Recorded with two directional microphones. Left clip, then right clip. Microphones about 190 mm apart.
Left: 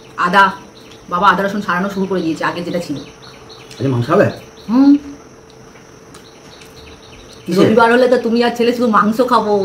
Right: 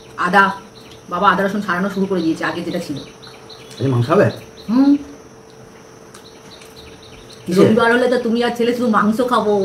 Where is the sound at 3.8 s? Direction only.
Centre (ahead or behind).